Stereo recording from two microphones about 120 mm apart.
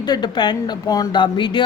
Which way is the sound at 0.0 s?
35° left (ahead or behind).